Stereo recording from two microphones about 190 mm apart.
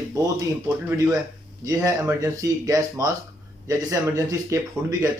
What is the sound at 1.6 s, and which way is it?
A man's voice, 15° right (ahead or behind).